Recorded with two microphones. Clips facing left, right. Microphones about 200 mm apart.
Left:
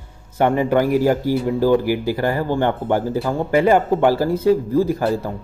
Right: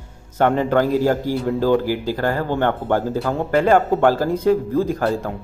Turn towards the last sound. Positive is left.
turn(degrees=5)  # may be behind; listen again after turning